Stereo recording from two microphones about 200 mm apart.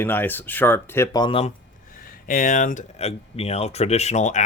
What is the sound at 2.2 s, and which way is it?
Speech, 40° left (ahead or behind).